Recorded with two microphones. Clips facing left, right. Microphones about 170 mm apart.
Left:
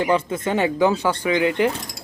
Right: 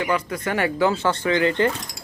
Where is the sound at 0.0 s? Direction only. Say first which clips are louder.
Left 3 dB; 30° left (ahead or behind); by 1.7 s 10° left (ahead or behind).